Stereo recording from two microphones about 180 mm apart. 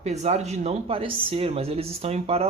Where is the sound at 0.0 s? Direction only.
35° right (ahead or behind).